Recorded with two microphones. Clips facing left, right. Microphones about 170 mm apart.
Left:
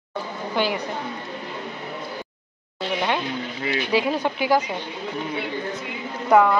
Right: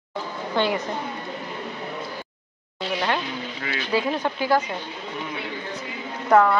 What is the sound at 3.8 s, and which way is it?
Speech, 15° left (ahead or behind).